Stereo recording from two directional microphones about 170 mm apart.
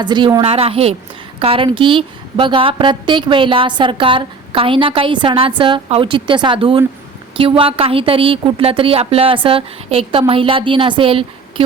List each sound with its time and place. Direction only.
0.0 s a woman's voice: 25° right (ahead or behind)
0.4 s a woman's voice: 35° right (ahead or behind)